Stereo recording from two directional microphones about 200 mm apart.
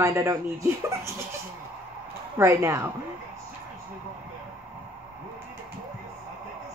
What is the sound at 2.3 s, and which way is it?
Speech, 15° right (ahead or behind).